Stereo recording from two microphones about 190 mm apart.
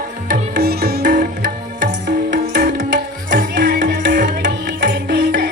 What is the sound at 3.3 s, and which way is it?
Tabla, 60° right (ahead or behind).